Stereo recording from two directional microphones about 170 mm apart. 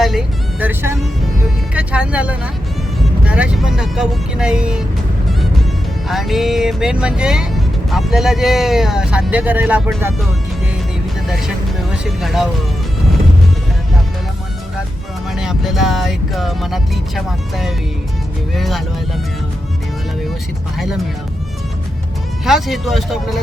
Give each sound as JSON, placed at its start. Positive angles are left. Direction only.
{"t": 0.0, "sound": "vehicle", "side_deg": -5}
{"t": 1.7, "sound": "speech", "side_deg": -10}
{"t": 3.0, "sound": "vehicle", "side_deg": -5}
{"t": 6.1, "sound": "speech", "side_deg": 0}
{"t": 11.3, "sound": "speech", "side_deg": 0}
{"t": 15.3, "sound": "speech", "side_deg": 0}
{"t": 20.7, "sound": "speech", "side_deg": 0}
{"t": 22.4, "sound": "speech", "side_deg": 0}